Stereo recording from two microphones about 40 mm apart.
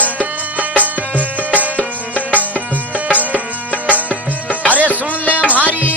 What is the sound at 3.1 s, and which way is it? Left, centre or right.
Music, right.